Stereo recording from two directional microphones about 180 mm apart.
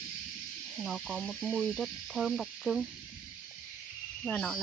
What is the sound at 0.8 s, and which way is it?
Speech, centre (ahead or behind).